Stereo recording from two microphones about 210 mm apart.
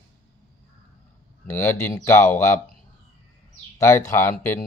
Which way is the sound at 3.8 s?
15° left (ahead or behind).